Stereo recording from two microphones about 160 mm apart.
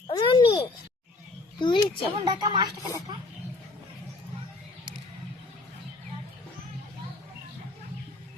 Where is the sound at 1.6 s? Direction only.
30° left (ahead or behind).